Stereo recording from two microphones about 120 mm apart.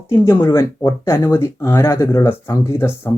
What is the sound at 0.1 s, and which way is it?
Speech, 20° left (ahead or behind).